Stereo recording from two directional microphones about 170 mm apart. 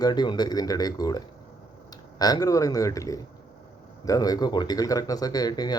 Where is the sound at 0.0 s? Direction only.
25° left (ahead or behind).